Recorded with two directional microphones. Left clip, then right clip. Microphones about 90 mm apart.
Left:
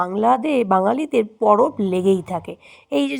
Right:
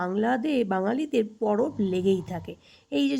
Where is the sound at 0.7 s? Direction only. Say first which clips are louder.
Left 9 dB; 50° left (ahead or behind).